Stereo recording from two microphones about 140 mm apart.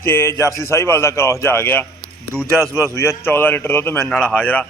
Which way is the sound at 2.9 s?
20° left (ahead or behind).